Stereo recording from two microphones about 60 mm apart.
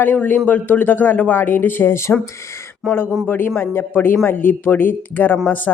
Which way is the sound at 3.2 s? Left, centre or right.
Left.